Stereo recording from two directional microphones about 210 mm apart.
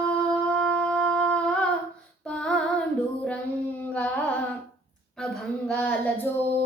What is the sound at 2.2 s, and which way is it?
Music, 5° left (ahead or behind).